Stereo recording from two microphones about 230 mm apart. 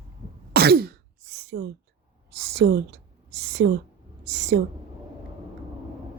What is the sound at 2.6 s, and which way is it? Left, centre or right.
A woman's voice, right.